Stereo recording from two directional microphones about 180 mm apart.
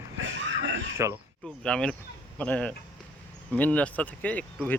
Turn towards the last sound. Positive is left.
turn(degrees=10)  # may be behind; listen again after turning